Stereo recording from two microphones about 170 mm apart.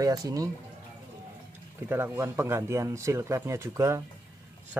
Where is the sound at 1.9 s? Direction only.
15° right (ahead or behind).